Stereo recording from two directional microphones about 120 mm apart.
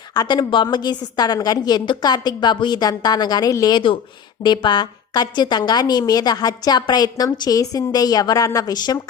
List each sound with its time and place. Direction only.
0.1 s a woman's voice: 35° left (ahead or behind)